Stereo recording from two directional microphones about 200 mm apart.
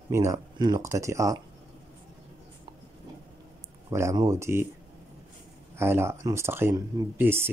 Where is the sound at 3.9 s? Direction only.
15° right (ahead or behind).